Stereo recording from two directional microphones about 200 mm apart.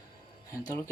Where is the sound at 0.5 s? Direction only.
15° left (ahead or behind).